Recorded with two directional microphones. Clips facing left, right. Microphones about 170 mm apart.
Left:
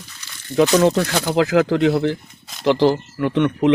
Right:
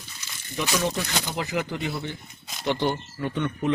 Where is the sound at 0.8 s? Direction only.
85° left.